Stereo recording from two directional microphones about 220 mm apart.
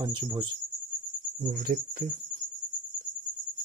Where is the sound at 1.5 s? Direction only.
40° right (ahead or behind).